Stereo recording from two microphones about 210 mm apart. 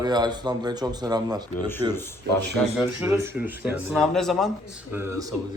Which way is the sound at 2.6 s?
5° left (ahead or behind).